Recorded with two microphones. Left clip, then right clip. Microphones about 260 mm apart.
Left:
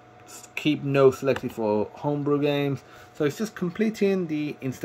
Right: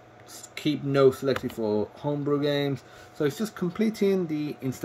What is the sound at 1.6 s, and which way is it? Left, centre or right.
Speech, centre.